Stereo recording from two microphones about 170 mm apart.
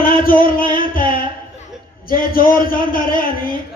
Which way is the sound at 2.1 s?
55° left (ahead or behind).